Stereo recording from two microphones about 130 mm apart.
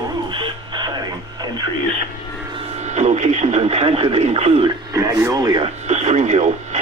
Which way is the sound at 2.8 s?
65° right (ahead or behind).